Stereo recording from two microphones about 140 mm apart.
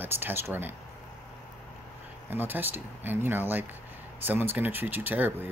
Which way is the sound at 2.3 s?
15° right (ahead or behind).